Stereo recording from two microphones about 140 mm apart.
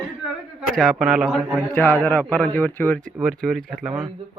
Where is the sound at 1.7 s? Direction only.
15° left (ahead or behind).